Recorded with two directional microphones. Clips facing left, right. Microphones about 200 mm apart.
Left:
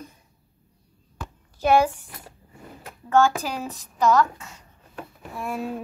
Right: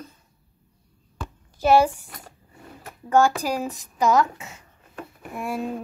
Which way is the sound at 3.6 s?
15° right (ahead or behind).